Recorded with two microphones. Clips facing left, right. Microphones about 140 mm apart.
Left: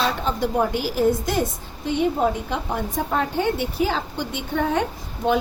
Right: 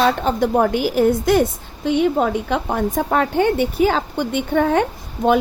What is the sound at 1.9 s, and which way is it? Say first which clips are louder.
A woman's voice: right 4 dB; 90° right.